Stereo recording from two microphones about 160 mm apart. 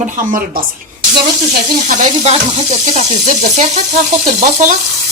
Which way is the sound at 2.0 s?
45° right (ahead or behind).